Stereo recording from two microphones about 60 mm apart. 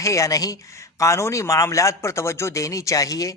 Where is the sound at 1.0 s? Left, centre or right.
Left.